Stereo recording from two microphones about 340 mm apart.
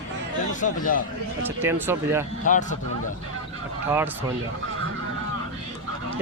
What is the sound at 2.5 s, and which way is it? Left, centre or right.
Speech, left.